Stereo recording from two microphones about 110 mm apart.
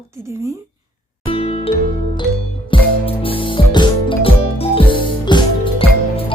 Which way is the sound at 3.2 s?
50° left (ahead or behind).